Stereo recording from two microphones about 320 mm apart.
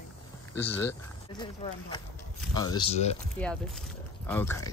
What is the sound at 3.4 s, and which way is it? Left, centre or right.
Speech, centre.